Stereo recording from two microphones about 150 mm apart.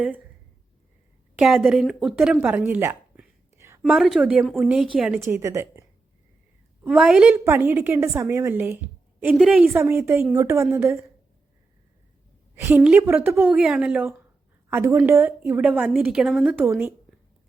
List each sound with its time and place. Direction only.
1.4 s a woman's voice: centre (ahead or behind)
2.4 s a sound: 15° right (ahead or behind)
3.9 s a woman's voice: centre (ahead or behind)
5.3 s a woman's voice: 20° right (ahead or behind)
6.8 s a woman's voice: 5° right (ahead or behind)
12.5 s a woman's voice: 10° right (ahead or behind)